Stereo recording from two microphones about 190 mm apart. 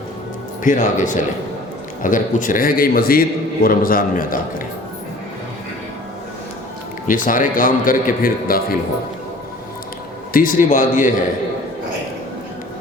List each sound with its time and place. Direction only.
0.6 s a man's voice: 45° left (ahead or behind)
7.1 s a man's voice: 45° left (ahead or behind)
10.3 s a man's voice: 45° left (ahead or behind)